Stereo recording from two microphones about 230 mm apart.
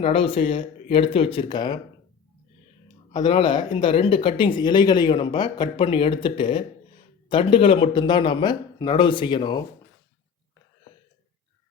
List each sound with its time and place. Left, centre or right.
0.0 s speech: left
3.2 s speech: left